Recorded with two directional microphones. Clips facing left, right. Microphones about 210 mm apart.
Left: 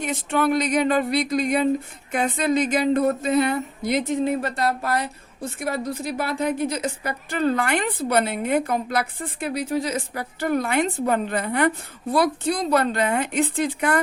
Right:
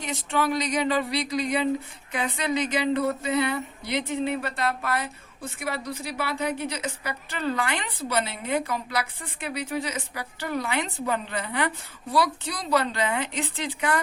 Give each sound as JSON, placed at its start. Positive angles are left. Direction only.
{"t": 0.0, "sound": "a woman's voice", "side_deg": 50}